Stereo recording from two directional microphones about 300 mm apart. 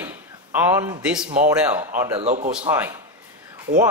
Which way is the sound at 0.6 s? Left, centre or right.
Centre.